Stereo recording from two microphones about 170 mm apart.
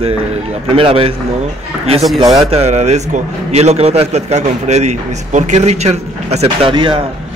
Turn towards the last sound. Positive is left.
turn(degrees=-30)  # may be behind; listen again after turning